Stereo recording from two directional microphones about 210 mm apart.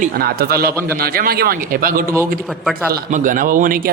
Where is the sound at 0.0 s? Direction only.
45° right (ahead or behind).